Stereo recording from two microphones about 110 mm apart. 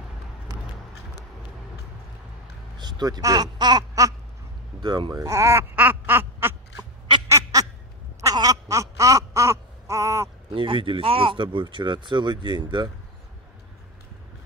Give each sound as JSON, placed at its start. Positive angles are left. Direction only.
{"t": 2.8, "sound": "speech", "side_deg": -40}
{"t": 5.8, "sound": "quack", "side_deg": -20}
{"t": 7.2, "sound": "duck", "side_deg": -25}
{"t": 8.2, "sound": "a sound", "side_deg": -35}
{"t": 10.5, "sound": "speech", "side_deg": -50}